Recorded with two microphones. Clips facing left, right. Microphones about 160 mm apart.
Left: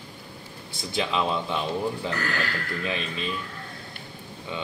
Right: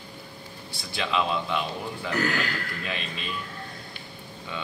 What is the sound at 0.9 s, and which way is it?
Speech, 25° left (ahead or behind).